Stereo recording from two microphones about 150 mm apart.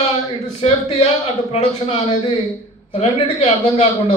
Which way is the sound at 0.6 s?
40° left (ahead or behind).